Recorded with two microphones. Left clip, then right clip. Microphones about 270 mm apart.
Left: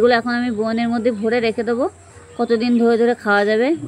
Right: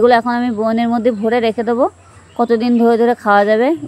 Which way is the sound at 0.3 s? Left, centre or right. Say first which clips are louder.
Right 4 dB; right.